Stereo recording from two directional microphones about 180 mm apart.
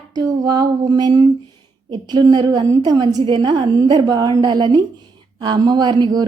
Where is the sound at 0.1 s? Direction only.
20° right (ahead or behind).